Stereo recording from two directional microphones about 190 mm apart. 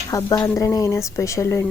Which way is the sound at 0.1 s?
20° left (ahead or behind).